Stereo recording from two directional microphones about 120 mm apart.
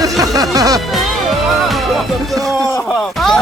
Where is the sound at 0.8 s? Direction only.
Centre (ahead or behind).